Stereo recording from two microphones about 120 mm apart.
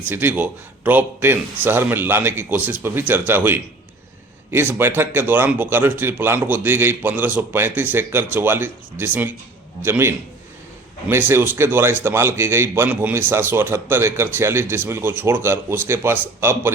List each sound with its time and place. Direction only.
0.0 s a man's voice: 15° right (ahead or behind)